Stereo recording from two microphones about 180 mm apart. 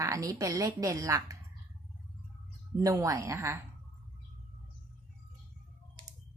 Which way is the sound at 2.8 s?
20° right (ahead or behind).